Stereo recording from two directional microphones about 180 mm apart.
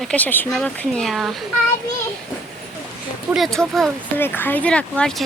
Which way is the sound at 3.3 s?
Centre (ahead or behind).